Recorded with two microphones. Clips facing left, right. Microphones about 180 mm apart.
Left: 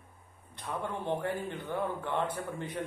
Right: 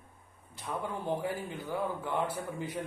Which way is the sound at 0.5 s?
10° right (ahead or behind).